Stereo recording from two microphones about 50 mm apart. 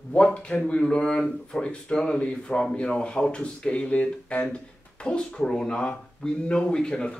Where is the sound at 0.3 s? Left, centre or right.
Left.